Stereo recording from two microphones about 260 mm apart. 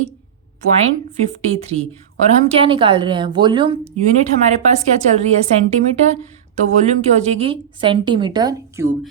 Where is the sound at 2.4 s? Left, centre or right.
Centre.